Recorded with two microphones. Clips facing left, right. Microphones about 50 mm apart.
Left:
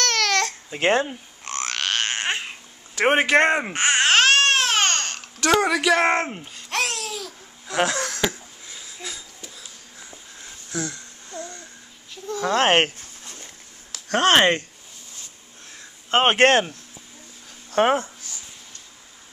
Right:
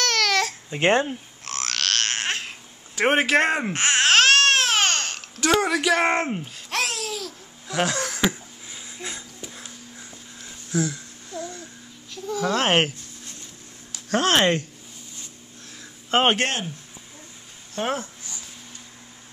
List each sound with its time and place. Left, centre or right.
0.0 s babbling: centre
0.7 s speech: centre
1.0 s a sound: centre
3.0 s speech: centre
3.7 s babbling: centre
8.2 s a sound: centre
10.7 s babbling: centre
12.4 s speech: centre
14.1 s speech: centre
15.8 s a sound: centre
16.3 s speech: left
17.8 s speech: left